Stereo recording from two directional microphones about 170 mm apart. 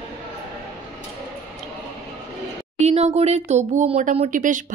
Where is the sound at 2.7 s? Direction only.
40° right (ahead or behind).